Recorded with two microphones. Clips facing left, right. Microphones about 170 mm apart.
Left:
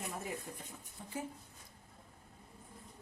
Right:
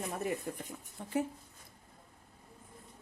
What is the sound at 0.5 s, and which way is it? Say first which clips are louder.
Speech: right 7 dB; 60° right (ahead or behind).